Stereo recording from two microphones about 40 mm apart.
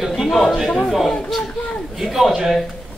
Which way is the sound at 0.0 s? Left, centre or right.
Centre.